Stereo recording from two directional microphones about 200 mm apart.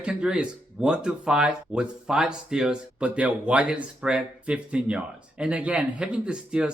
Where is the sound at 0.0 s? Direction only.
5° right (ahead or behind).